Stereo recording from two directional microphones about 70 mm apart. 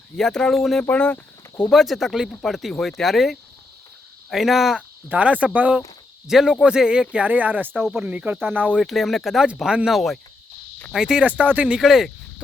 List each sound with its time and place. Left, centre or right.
0.2 s speech: centre
0.8 s speech: centre
1.7 s speech: centre
5.0 s speech: right
6.2 s speech: centre; by 8.8 s right
8.8 s speech: centre
11.2 s speech: right
11.8 s speech: centre